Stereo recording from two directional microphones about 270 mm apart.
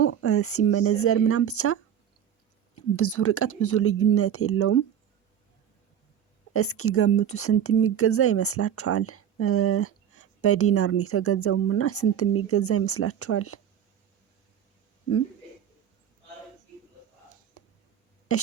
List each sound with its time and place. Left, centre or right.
0.0 s a woman's voice: left
6.5 s a woman's voice: left
18.3 s a sound: left